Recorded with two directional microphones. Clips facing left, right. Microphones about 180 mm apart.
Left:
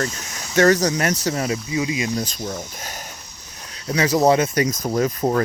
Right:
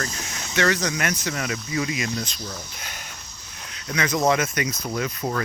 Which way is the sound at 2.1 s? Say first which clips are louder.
Left 6 dB; 45° left (ahead or behind).